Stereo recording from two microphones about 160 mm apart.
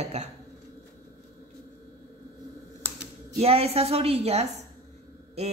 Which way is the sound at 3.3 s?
40° right (ahead or behind).